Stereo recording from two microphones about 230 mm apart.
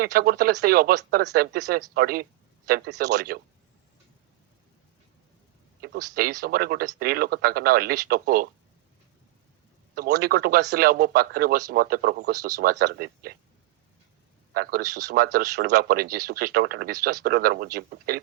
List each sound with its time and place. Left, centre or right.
0.0 s speech: right
6.4 s speech: right
9.9 s speech: right
14.5 s speech: right